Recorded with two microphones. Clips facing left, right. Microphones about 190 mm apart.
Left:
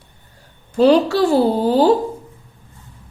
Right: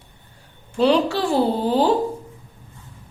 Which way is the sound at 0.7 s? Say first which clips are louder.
Left 5 dB; 40° left (ahead or behind).